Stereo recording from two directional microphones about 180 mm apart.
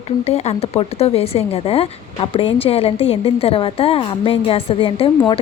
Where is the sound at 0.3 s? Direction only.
35° left (ahead or behind).